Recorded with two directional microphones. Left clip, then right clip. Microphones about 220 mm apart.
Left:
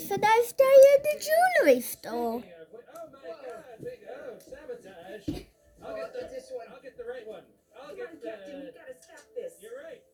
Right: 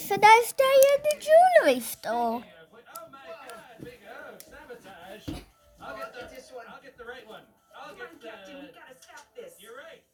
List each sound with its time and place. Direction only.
0.0 s a child's voice: 35° right (ahead or behind)
0.7 s a child's voice: 5° right (ahead or behind)
1.6 s speech: 25° right (ahead or behind)